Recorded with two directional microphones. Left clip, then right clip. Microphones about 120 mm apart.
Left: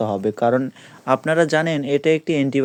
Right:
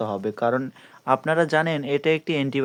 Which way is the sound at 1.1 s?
35° left (ahead or behind).